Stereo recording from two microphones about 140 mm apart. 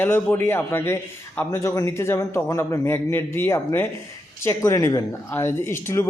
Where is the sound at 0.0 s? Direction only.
15° left (ahead or behind).